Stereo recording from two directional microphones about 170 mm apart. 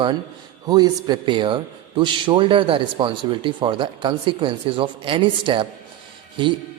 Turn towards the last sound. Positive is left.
turn(degrees=-30)  # may be behind; listen again after turning